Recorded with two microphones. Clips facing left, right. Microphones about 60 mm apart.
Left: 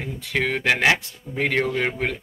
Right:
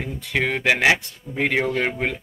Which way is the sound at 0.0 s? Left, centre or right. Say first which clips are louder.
Right 1 dB; centre.